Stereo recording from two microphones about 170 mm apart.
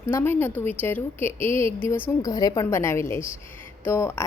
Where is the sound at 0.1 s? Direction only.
15° left (ahead or behind).